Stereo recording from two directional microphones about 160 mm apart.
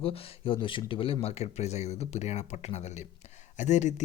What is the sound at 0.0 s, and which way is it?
Speech, 35° left (ahead or behind).